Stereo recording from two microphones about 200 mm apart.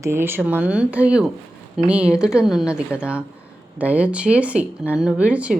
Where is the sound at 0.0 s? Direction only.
10° right (ahead or behind).